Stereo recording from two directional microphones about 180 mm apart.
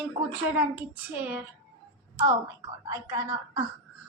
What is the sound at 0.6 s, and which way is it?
Speech, 10° right (ahead or behind).